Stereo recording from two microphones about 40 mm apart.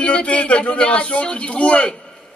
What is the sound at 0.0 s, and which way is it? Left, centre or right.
A man's voice, left.